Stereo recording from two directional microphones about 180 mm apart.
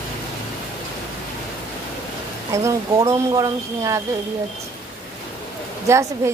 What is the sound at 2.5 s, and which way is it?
A woman's voice, 15° right (ahead or behind).